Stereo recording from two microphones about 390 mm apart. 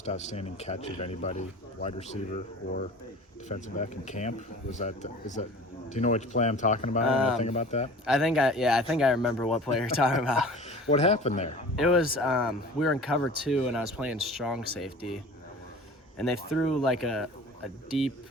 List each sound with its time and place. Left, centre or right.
0.0 s speech: centre
8.0 s speech: centre
10.7 s speech: centre
11.8 s speech: centre